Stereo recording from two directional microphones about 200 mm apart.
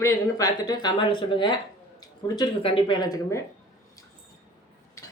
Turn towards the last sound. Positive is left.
turn(degrees=15)  # may be behind; listen again after turning